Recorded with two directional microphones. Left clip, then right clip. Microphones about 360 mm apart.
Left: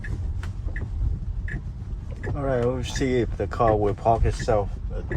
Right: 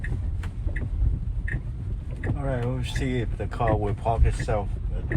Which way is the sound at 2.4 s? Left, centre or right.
Left.